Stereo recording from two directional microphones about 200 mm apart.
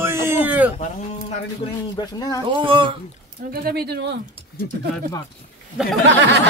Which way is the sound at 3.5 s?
50° right (ahead or behind).